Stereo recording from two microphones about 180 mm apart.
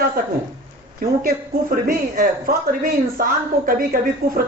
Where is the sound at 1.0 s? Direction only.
50° right (ahead or behind).